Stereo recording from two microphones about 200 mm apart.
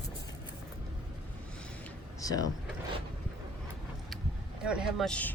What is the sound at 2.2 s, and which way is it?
Speech, 20° left (ahead or behind).